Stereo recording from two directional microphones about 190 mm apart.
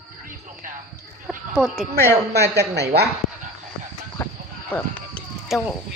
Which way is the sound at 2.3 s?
60° right (ahead or behind).